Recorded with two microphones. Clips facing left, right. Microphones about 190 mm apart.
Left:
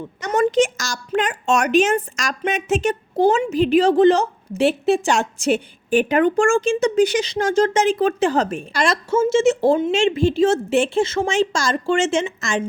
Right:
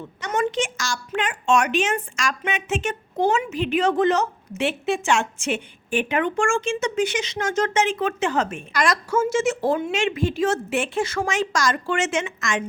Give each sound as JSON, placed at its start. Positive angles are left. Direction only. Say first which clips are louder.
{"t": 0.2, "sound": "speech", "louder": "left 7 dB", "side_deg": 40}